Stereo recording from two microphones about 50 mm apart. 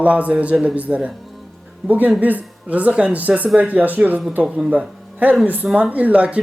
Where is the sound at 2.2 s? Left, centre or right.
Right.